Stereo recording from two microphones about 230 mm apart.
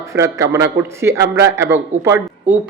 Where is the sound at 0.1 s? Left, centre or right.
Centre.